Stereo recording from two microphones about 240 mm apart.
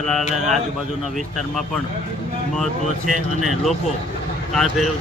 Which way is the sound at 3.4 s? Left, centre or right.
Centre.